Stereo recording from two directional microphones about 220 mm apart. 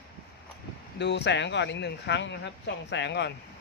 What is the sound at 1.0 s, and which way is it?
Speech, 50° left (ahead or behind).